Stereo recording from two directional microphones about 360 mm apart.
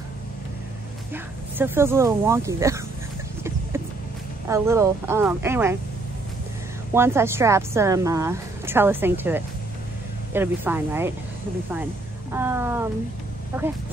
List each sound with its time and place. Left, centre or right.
1.1 s speech: centre
4.5 s speech: centre
6.9 s speech: centre
12.3 s speech: centre